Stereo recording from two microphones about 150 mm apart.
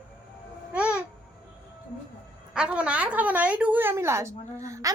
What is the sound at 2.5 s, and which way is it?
A woman's voice, 5° right (ahead or behind).